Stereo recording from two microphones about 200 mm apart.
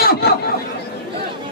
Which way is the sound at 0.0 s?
50° left (ahead or behind).